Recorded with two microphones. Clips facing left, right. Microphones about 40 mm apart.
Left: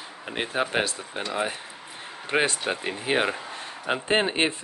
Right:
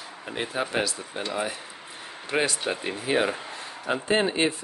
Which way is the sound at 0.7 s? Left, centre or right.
Left.